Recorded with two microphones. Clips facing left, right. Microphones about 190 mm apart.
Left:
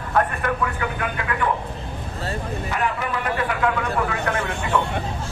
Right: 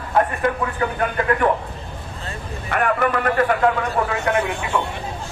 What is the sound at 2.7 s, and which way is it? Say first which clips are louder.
Speech: right 7 dB; 55° right (ahead or behind).